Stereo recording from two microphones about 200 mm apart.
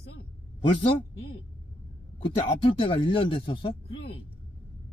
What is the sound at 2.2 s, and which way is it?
Speech, 25° left (ahead or behind).